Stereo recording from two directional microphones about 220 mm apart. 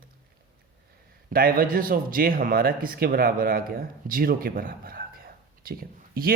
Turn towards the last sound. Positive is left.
turn(degrees=-40)  # may be behind; listen again after turning